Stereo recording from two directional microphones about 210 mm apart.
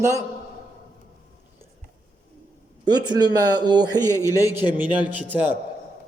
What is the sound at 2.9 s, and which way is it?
Speech, 20° right (ahead or behind).